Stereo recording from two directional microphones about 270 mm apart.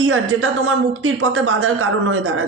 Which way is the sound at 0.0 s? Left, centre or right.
Right.